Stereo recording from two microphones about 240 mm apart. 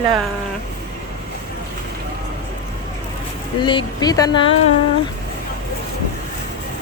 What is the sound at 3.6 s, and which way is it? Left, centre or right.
Speech, centre.